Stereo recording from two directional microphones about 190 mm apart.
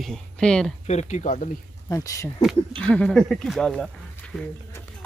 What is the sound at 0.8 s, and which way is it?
Speech, 40° left (ahead or behind).